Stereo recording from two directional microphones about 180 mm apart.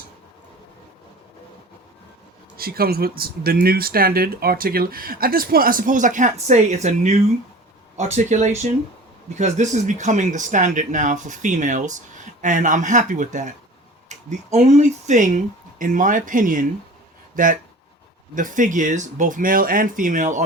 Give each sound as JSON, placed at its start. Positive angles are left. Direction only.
{"t": 2.6, "sound": "speech", "side_deg": -55}